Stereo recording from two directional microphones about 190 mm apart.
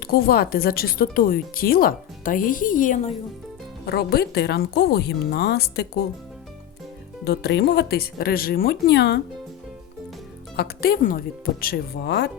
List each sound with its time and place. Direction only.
0.0 s speech: 55° left (ahead or behind)
3.8 s a woman's voice: 55° left (ahead or behind)
7.3 s a woman's voice: 60° left (ahead or behind)
10.6 s speech: 55° left (ahead or behind)